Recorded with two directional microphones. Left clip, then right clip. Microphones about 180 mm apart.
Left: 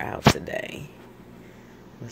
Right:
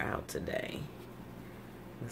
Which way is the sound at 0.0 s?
15° left (ahead or behind).